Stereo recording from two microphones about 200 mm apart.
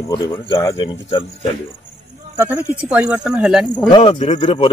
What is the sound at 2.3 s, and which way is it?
A man's voice, 10° right (ahead or behind).